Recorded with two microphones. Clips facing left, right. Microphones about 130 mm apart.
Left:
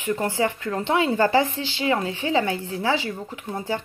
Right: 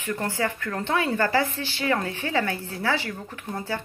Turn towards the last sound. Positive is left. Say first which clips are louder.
# left 3 dB
turn(degrees=15)  # may be behind; listen again after turning